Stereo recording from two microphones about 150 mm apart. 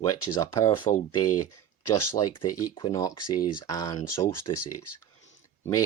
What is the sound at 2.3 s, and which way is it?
Speech, 35° left (ahead or behind).